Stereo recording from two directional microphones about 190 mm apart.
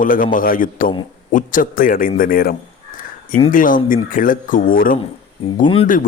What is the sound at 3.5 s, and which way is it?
A man's voice, 45° left (ahead or behind).